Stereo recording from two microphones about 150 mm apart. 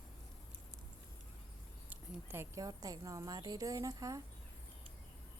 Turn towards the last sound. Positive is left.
turn(degrees=-20)  # may be behind; listen again after turning